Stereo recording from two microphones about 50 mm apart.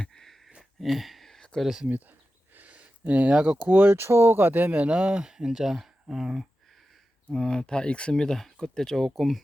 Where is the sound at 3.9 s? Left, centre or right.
Right.